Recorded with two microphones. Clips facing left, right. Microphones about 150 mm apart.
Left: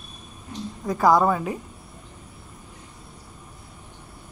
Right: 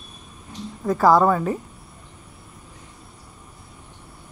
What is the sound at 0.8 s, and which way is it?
Speech, 20° left (ahead or behind).